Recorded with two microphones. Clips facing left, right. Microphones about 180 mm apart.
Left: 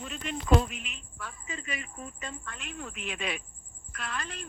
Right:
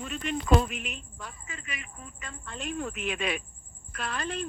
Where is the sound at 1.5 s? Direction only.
30° left (ahead or behind).